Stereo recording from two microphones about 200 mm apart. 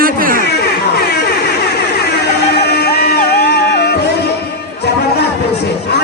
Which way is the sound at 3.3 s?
55° left (ahead or behind).